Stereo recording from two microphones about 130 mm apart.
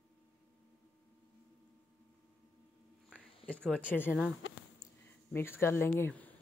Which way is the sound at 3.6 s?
10° left (ahead or behind).